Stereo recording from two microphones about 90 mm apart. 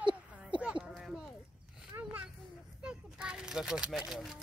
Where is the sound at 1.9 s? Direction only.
40° right (ahead or behind).